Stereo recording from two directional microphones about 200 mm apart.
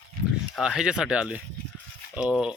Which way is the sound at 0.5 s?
5° right (ahead or behind).